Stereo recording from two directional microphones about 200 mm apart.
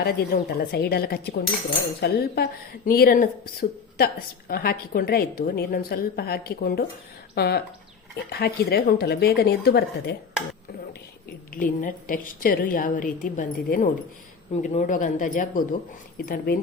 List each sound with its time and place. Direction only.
0.0 s a woman's voice: 50° left (ahead or behind)
11.5 s a woman's voice: 40° left (ahead or behind)